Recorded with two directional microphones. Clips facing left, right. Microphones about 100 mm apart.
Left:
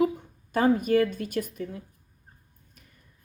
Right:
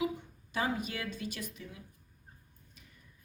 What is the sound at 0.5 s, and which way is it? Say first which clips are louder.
Speech: left 13 dB; 50° left (ahead or behind).